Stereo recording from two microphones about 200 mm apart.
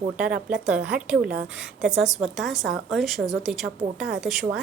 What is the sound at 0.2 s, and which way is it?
A woman's voice, 5° right (ahead or behind).